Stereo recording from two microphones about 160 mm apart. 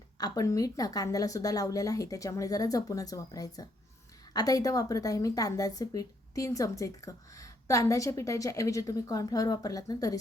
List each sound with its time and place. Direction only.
0.2 s a woman's voice: 20° left (ahead or behind)